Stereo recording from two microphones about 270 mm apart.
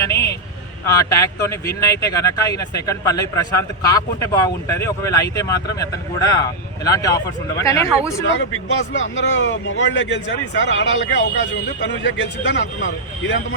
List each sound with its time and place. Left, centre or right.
0.0 s speech: centre
9.0 s speech: left